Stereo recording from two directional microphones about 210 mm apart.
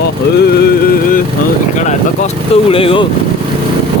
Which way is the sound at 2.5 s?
25° left (ahead or behind).